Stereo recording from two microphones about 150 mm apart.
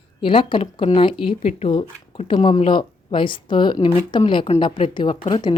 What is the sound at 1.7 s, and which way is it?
Speech, 35° left (ahead or behind).